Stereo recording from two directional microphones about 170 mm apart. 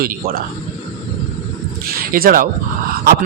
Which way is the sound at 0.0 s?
60° right (ahead or behind).